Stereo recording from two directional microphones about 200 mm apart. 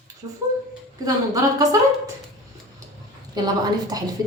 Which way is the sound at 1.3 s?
20° right (ahead or behind).